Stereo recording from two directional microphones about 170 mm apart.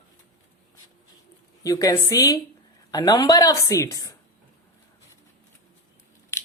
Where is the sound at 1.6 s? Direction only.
20° left (ahead or behind).